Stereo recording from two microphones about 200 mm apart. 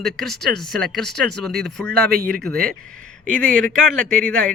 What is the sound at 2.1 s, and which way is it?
Speech, 45° right (ahead or behind).